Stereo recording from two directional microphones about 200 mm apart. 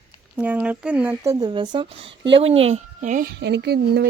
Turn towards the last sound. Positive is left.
turn(degrees=-55)  # may be behind; listen again after turning